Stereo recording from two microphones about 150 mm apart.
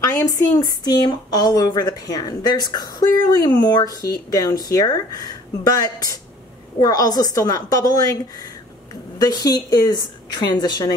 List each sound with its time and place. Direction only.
0.0 s speech: 20° left (ahead or behind)